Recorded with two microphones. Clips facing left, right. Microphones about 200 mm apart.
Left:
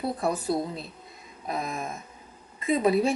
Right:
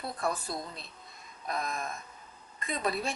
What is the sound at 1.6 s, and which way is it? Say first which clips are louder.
Speech: left 3 dB; 5° left (ahead or behind).